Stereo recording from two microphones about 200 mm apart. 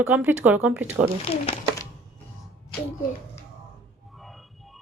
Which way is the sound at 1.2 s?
30° left (ahead or behind).